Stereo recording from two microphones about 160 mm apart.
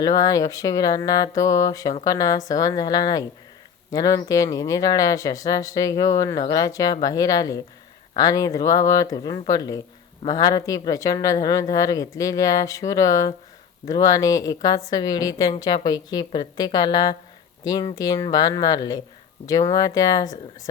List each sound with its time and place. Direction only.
0.0 s speech: 25° left (ahead or behind)